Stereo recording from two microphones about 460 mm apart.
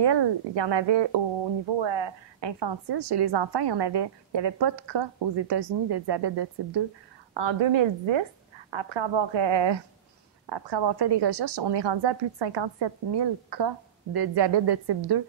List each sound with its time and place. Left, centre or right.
0.0 s a woman's voice: right
7.3 s a woman's voice: right